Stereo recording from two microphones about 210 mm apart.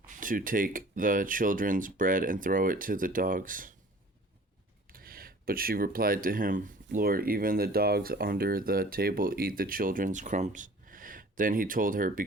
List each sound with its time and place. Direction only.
0.1 s speech: 40° right (ahead or behind)
4.9 s speech: 45° right (ahead or behind)